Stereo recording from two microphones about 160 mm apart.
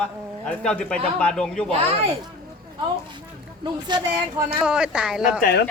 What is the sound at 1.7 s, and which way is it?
Speech, 35° right (ahead or behind).